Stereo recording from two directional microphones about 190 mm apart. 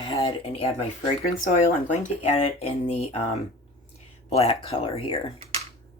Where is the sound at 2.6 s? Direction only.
35° left (ahead or behind).